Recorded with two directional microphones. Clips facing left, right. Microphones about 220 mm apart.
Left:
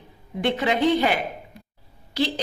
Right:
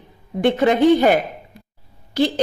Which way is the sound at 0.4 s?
50° right (ahead or behind).